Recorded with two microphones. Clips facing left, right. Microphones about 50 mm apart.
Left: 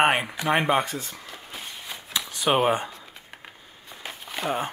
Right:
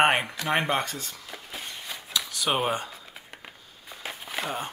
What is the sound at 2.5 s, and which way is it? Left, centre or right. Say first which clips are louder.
Speech: left 5 dB; centre.